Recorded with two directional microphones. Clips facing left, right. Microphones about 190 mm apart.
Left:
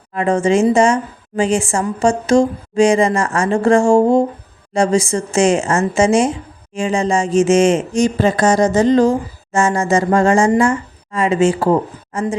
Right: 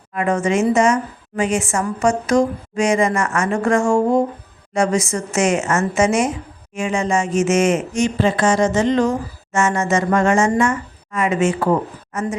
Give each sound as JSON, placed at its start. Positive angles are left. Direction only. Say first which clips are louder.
{"t": 0.1, "sound": "a woman's voice", "louder": "left 4 dB", "side_deg": 30}